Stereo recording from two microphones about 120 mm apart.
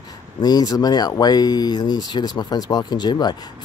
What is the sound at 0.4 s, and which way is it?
Speech, 35° left (ahead or behind).